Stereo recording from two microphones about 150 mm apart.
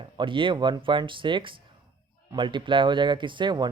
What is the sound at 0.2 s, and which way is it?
A man's voice, 35° right (ahead or behind).